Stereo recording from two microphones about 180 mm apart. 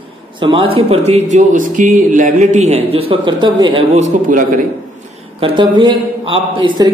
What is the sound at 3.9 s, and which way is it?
Speech, 45° right (ahead or behind).